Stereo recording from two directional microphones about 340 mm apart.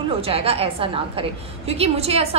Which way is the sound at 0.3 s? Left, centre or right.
Centre.